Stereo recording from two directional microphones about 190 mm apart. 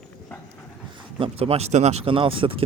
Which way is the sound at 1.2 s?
30° right (ahead or behind).